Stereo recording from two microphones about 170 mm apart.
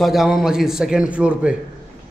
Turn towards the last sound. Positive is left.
turn(degrees=-5)  # may be behind; listen again after turning